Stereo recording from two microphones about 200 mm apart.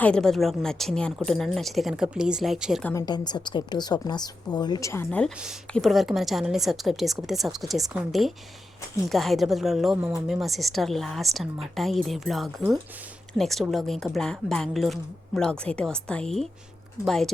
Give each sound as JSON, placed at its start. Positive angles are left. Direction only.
{"t": 0.0, "sound": "a woman's voice", "side_deg": 5}
{"t": 2.9, "sound": "a woman's voice", "side_deg": 20}